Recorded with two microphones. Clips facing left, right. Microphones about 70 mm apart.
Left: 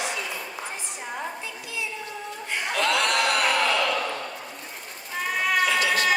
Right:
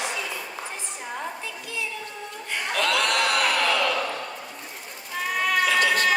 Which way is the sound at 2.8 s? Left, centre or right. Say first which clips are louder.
Even; left.